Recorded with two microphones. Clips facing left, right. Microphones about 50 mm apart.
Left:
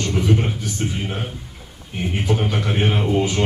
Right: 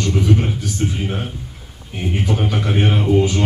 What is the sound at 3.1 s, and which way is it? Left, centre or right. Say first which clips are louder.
Speech: right 3 dB; centre.